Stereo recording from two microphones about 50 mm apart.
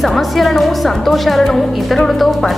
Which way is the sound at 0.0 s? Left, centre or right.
Centre.